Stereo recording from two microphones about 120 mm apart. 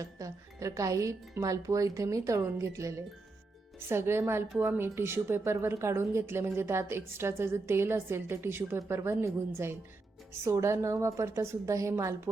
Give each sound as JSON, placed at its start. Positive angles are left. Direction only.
{"t": 0.0, "sound": "speech", "side_deg": -30}